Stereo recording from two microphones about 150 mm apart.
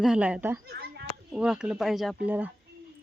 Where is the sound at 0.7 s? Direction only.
90° right.